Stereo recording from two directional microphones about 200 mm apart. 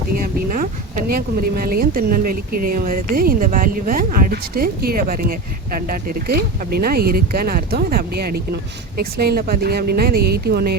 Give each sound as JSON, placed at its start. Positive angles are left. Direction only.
{"t": 0.2, "sound": "speech", "side_deg": -40}